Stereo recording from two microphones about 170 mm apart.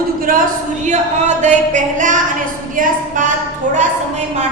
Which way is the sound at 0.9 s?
45° right (ahead or behind).